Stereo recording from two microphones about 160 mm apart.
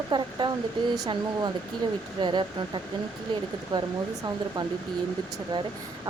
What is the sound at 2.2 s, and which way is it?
Speech, 30° right (ahead or behind).